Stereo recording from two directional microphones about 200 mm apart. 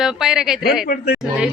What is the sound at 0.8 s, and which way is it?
Speech, 50° left (ahead or behind).